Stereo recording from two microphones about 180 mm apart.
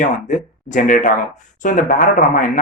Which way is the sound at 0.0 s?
45° left (ahead or behind).